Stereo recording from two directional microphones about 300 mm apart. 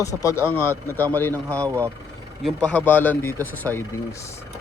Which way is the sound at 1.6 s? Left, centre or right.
Centre.